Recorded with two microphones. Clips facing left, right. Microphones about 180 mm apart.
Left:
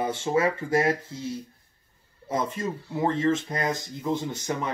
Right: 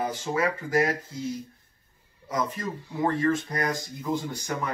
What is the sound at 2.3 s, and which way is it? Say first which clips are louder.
Speech: left 2 dB; 25° left (ahead or behind).